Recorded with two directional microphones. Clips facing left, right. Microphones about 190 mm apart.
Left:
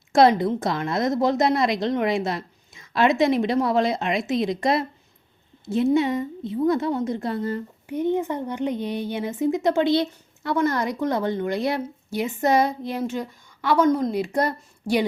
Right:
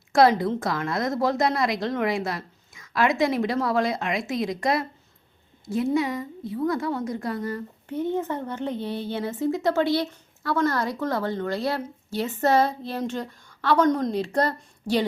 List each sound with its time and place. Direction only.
0.1 s a woman's voice: 20° left (ahead or behind)